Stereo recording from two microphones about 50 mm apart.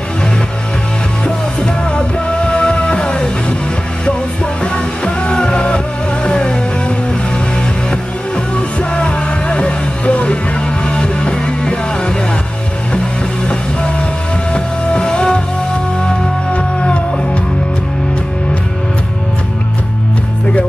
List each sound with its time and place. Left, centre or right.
1.2 s music: centre
5.0 s music: centre
8.5 s music: left
14.5 s music: centre
16.5 s music: left